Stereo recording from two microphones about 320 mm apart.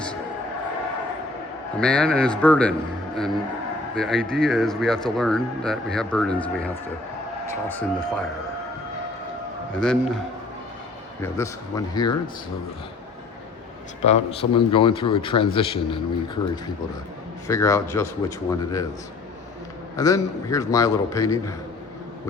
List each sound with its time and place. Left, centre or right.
1.8 s speech: centre
3.9 s speech: centre
7.7 s speech: centre
9.7 s speech: centre
11.2 s a man's voice: centre
14.0 s a man's voice: centre
17.5 s a man's voice: centre
20.0 s a man's voice: centre